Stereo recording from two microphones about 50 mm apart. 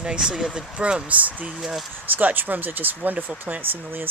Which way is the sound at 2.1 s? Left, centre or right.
Right.